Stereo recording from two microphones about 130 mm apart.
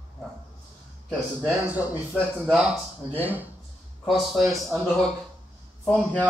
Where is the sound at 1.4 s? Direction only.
10° right (ahead or behind).